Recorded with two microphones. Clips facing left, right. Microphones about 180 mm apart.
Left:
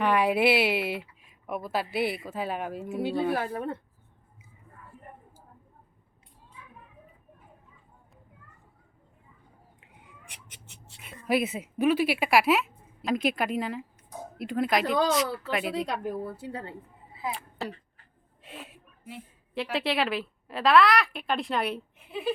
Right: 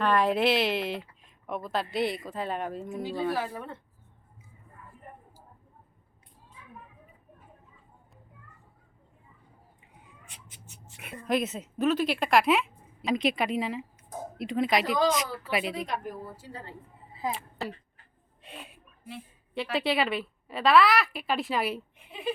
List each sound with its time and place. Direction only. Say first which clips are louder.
0.0 s a woman's voice: left 1 dB; 10° left (ahead or behind)
3.3 s speech: left 3 dB; 50° left (ahead or behind)
11.3 s a woman's voice: left 2 dB; 10° left (ahead or behind)
15.1 s speech: left 2 dB; 10° right (ahead or behind)
15.7 s a woman's voice: left 4 dB; 70° left (ahead or behind)
17.3 s a woman's voice: even; centre (ahead or behind)
18.4 s a sound: left 1 dB; 5° left (ahead or behind)
19.7 s a woman's voice: right 1 dB; centre (ahead or behind)